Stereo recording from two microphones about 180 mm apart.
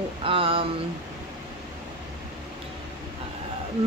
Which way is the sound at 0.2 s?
30° right (ahead or behind).